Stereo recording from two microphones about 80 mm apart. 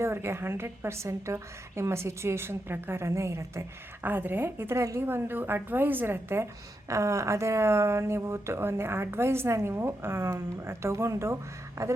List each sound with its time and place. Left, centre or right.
0.0 s a woman's voice: right
4.0 s a woman's voice: right